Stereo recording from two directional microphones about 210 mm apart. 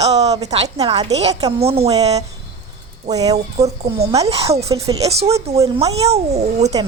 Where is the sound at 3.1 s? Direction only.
15° right (ahead or behind).